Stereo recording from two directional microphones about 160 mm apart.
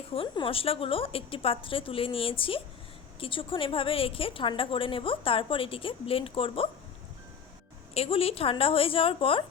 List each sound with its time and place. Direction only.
0.1 s a woman's voice: 35° left (ahead or behind)
7.9 s a woman's voice: 40° left (ahead or behind)